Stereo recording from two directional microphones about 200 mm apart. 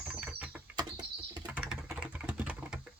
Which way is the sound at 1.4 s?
5° right (ahead or behind).